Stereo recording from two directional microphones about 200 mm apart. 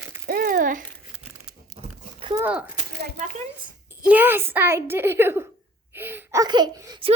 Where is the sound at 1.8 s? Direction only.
25° right (ahead or behind).